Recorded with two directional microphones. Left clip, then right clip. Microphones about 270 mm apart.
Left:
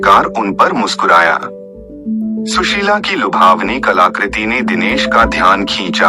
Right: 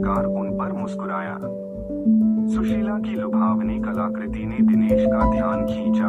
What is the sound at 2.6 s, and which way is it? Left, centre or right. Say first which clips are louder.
Speech: left 14 dB; left.